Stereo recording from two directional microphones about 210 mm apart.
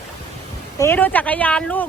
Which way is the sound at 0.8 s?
10° left (ahead or behind).